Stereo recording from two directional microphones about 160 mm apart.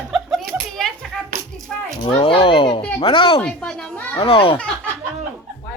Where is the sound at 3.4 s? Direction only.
5° left (ahead or behind).